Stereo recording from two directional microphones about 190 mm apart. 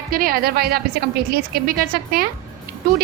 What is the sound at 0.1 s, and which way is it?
A woman's voice, 50° right (ahead or behind).